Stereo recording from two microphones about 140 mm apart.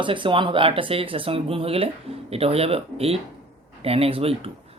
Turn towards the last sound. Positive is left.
turn(degrees=-45)  # may be behind; listen again after turning